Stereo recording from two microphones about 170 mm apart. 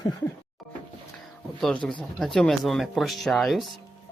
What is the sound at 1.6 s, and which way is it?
Speech, 5° left (ahead or behind).